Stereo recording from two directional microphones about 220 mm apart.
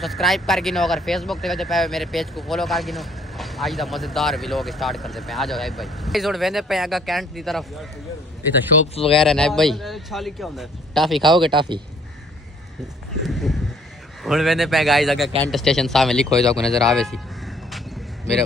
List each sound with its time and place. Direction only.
0.0 s speech: centre (ahead or behind)
9.1 s speech: centre (ahead or behind)
11.2 s speech: 20° right (ahead or behind)
13.2 s speech: centre (ahead or behind)